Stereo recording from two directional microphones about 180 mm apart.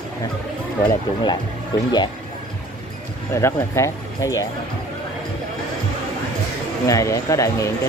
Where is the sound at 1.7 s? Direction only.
25° left (ahead or behind).